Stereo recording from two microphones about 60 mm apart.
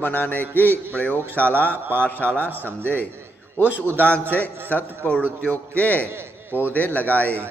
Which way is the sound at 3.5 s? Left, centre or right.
Right.